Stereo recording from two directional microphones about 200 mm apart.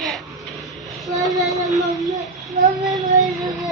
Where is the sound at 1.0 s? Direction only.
15° right (ahead or behind).